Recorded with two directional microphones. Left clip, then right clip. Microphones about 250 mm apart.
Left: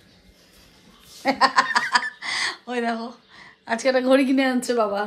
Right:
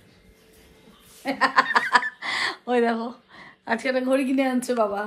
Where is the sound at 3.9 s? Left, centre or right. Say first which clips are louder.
Left 6 dB; left.